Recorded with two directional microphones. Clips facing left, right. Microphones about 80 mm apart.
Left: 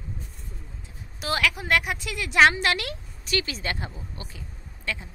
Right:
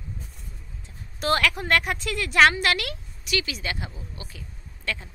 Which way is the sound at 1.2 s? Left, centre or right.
Centre.